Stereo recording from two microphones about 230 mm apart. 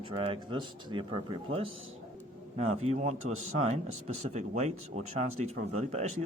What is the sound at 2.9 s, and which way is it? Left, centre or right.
Speech, right.